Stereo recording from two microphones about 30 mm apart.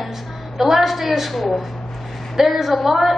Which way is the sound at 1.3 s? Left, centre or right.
Centre.